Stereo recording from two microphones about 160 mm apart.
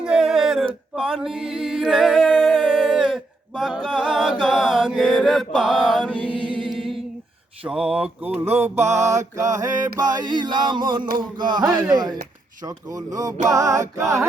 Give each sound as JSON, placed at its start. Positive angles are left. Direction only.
{"t": 0.0, "sound": "a capella", "side_deg": -5}
{"t": 4.4, "sound": "mantra", "side_deg": -5}
{"t": 6.1, "sound": "mantra", "side_deg": -30}
{"t": 6.6, "sound": "music", "side_deg": 0}
{"t": 7.6, "sound": "speech", "side_deg": -5}
{"t": 8.4, "sound": "mantra", "side_deg": -45}
{"t": 9.0, "sound": "a sound", "side_deg": -20}